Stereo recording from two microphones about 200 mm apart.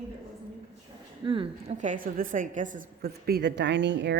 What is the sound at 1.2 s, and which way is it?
A woman's voice, 25° right (ahead or behind).